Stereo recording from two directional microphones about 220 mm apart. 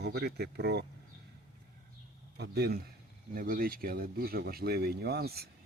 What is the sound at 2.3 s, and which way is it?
A man's voice, 45° right (ahead or behind).